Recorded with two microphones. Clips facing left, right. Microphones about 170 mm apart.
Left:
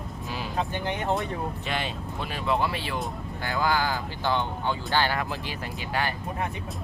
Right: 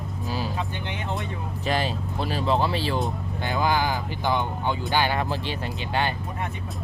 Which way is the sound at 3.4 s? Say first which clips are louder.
Right 2 dB; 20° right (ahead or behind).